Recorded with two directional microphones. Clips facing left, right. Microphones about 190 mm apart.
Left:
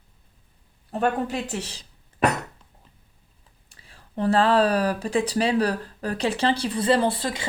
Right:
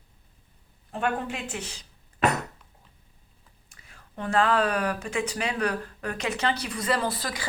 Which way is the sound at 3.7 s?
30° left (ahead or behind).